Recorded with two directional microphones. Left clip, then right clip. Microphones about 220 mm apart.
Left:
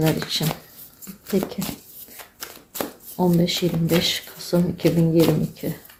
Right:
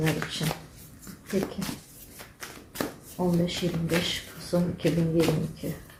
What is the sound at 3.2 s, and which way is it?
Speech, 45° left (ahead or behind).